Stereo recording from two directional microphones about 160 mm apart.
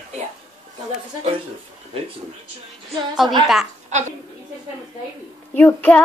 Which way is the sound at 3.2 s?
30° right (ahead or behind).